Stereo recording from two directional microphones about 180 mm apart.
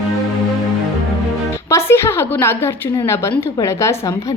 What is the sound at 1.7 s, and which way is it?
A woman's voice, 15° left (ahead or behind).